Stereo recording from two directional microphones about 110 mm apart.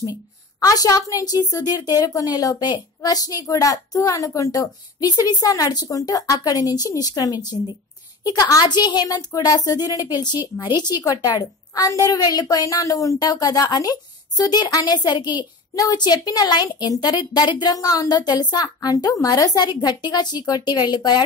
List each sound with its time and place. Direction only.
0.6 s a woman's voice: 35° left (ahead or behind)